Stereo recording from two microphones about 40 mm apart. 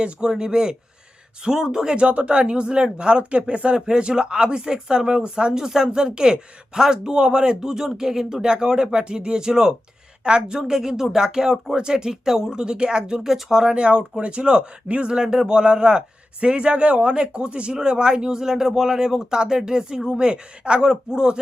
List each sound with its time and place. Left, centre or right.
0.0 s speech: centre
2.0 s speech: right
13.1 s speech: centre
13.7 s speech: right